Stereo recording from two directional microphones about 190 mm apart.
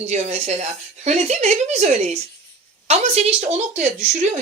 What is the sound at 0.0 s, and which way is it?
A woman's voice, 35° right (ahead or behind).